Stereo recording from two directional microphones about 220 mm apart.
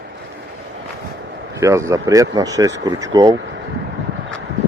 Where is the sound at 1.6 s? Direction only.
15° right (ahead or behind).